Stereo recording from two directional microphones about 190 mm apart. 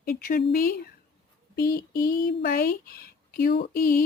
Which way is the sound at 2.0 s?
60° left (ahead or behind).